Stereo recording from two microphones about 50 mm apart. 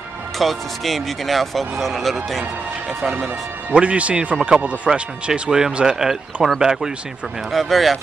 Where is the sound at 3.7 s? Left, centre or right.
Right.